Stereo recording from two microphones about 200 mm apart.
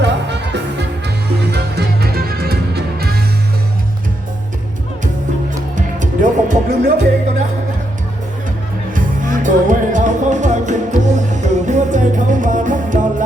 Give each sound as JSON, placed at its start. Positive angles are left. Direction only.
{"t": 0.0, "sound": "music", "side_deg": -60}
{"t": 5.7, "sound": "music", "side_deg": -40}
{"t": 9.0, "sound": "music", "side_deg": -40}